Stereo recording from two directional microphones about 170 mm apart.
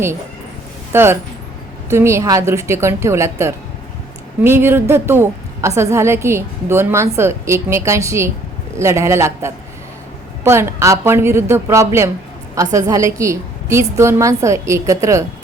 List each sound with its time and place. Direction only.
0.9 s a woman's voice: 15° right (ahead or behind)